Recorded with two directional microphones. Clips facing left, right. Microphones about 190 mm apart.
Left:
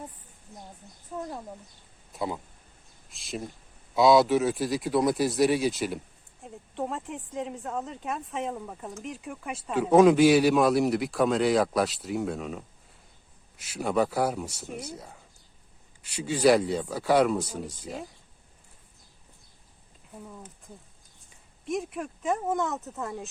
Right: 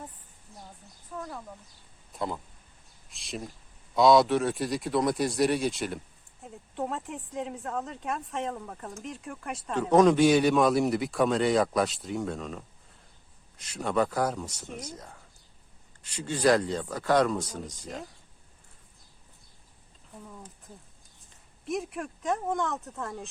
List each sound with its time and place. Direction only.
1.2 s speech: 30° left (ahead or behind)
2.1 s speech: 5° left (ahead or behind)
21.6 s speech: centre (ahead or behind)